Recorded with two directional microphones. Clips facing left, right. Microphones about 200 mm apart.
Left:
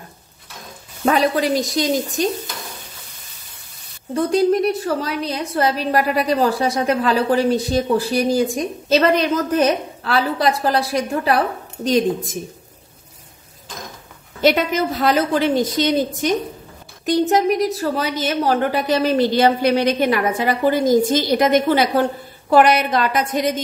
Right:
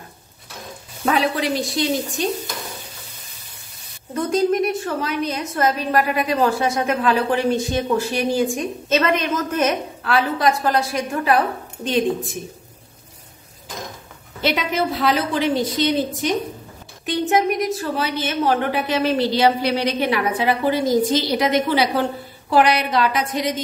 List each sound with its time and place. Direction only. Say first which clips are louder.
1.0 s a woman's voice: left 3 dB; 40° left (ahead or behind)
4.1 s a woman's voice: left 3 dB; 35° left (ahead or behind)
14.4 s a woman's voice: left 4 dB; 45° left (ahead or behind)